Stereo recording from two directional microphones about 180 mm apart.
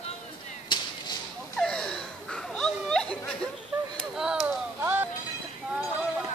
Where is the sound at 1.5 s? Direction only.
5° left (ahead or behind).